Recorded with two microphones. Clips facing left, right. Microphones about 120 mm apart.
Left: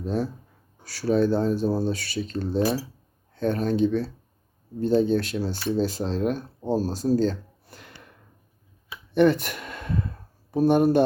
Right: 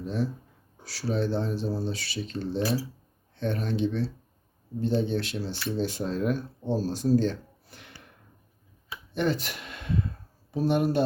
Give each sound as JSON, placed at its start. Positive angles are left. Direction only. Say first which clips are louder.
{"t": 0.0, "sound": "speech", "louder": "left 3 dB", "side_deg": 40}
{"t": 0.9, "sound": "speech", "louder": "left 7 dB", "side_deg": 50}
{"t": 9.1, "sound": "speech", "louder": "left 8 dB", "side_deg": 60}